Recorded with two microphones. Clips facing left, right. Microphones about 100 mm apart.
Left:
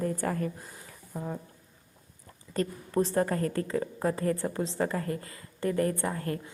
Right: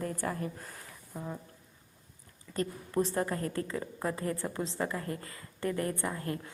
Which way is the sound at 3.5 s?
35° left (ahead or behind).